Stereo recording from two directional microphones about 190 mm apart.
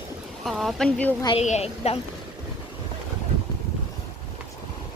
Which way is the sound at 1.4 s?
35° left (ahead or behind).